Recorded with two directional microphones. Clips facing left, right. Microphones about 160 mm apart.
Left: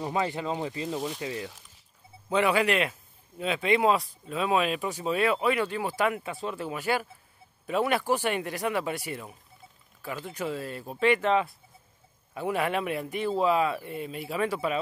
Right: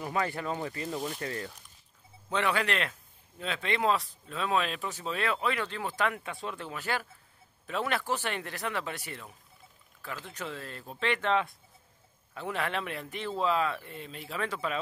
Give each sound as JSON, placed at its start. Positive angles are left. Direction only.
{"t": 0.0, "sound": "speech", "side_deg": 20}
{"t": 0.8, "sound": "speech", "side_deg": 0}
{"t": 1.2, "sound": "speech", "side_deg": 15}